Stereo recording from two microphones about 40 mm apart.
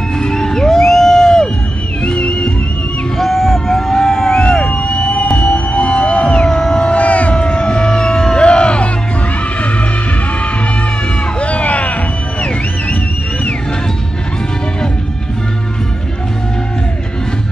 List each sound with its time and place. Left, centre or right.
0.2 s music: centre
2.0 s music: left
3.2 s a sound: centre
4.4 s emergency vehicle: left
4.6 s music: left
11.3 s music: left